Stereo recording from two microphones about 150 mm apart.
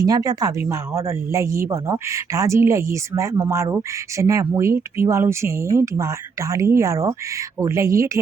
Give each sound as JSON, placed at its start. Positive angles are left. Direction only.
{"t": 0.0, "sound": "speech", "side_deg": -25}